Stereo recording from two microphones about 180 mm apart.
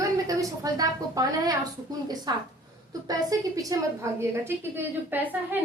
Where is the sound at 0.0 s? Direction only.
20° right (ahead or behind).